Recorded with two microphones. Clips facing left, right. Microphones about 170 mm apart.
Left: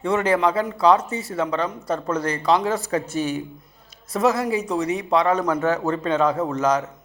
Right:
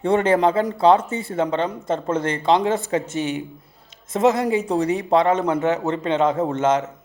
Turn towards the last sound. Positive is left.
turn(degrees=-25)  # may be behind; listen again after turning